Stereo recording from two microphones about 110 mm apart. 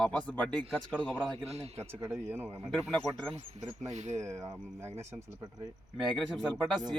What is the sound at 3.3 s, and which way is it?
Speech, 90° right.